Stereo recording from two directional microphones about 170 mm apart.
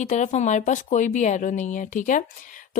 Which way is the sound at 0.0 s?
45° left (ahead or behind).